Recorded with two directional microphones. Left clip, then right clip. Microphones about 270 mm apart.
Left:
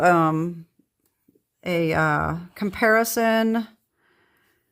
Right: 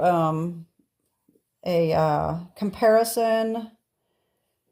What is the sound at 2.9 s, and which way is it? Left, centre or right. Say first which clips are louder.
Speech: even; left.